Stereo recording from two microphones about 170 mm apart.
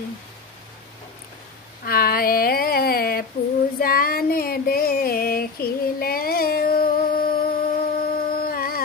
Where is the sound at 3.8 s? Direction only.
60° left (ahead or behind).